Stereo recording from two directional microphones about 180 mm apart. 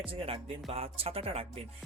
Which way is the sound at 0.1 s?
30° right (ahead or behind).